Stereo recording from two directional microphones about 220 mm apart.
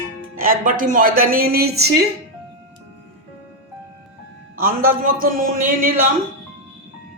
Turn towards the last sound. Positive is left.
turn(degrees=-40)  # may be behind; listen again after turning